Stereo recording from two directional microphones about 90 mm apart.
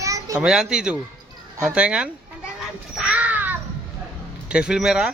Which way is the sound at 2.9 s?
10° right (ahead or behind).